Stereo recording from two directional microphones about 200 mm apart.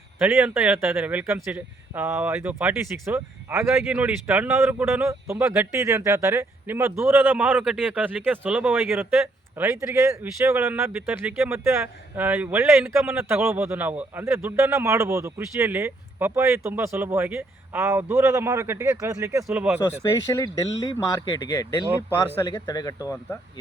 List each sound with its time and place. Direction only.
0.2 s a man's voice: 10° right (ahead or behind)
19.8 s speech: 15° left (ahead or behind)